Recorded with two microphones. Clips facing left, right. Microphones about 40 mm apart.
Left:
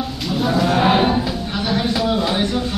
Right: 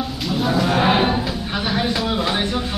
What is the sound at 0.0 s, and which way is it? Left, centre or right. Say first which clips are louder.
Livestock: left 1 dB; centre.